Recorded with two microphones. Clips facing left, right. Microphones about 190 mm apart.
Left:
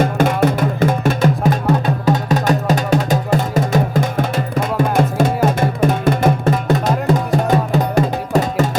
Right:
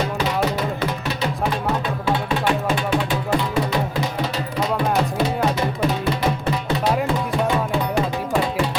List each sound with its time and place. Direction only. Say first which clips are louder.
0.0 s music: left 7 dB; 50° left (ahead or behind)